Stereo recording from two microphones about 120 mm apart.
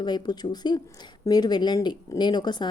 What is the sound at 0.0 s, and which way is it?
Speech, 35° left (ahead or behind).